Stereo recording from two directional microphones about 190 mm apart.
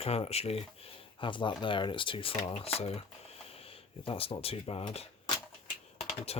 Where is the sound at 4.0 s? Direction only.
30° left (ahead or behind).